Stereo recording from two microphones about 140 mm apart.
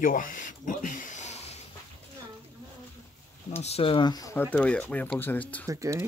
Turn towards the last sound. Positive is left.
turn(degrees=-20)  # may be behind; listen again after turning